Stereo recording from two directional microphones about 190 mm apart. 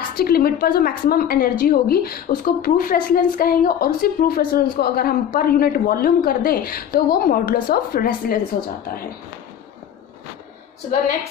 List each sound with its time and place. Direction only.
0.1 s a woman's voice: 55° left (ahead or behind)